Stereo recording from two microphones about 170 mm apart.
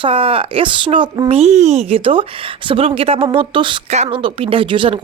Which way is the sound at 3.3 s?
30° right (ahead or behind).